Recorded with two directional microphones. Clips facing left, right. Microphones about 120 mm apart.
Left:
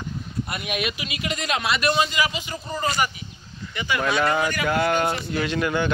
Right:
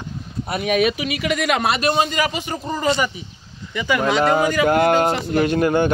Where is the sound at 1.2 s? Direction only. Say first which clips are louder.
Right 6 dB; 75° right (ahead or behind).